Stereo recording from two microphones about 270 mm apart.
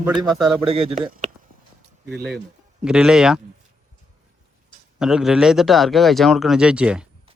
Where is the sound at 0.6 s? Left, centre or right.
Right.